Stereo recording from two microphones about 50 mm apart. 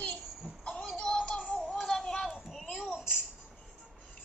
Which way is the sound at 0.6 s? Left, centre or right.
Centre.